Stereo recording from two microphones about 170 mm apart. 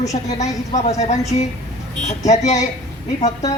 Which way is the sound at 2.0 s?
40° left (ahead or behind).